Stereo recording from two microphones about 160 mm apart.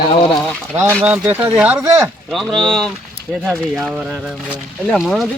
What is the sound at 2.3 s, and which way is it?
Speech, centre (ahead or behind).